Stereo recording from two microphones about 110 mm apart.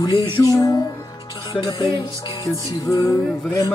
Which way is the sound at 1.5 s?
45° left (ahead or behind).